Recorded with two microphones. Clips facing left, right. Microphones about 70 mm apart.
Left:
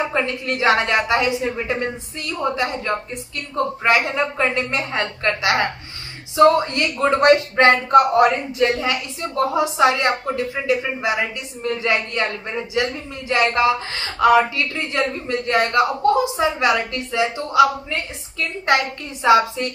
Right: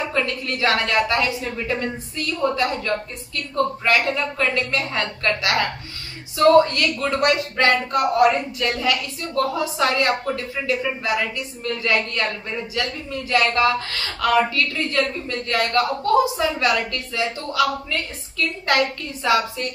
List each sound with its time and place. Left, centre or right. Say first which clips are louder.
0.0 s speech: left 2 dB; left